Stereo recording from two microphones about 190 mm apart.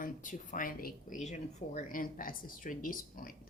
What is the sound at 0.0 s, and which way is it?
A woman's voice, 45° left (ahead or behind).